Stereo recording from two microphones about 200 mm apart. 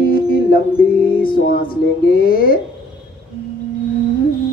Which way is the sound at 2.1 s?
45° left (ahead or behind).